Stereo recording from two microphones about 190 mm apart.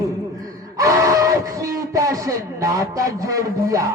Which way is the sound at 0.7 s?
15° right (ahead or behind).